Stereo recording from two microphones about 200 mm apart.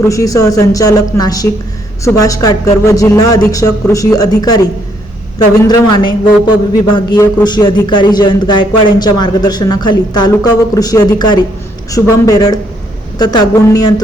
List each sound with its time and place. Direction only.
0.0 s speech: 15° left (ahead or behind)
5.6 s a man's voice: 20° left (ahead or behind)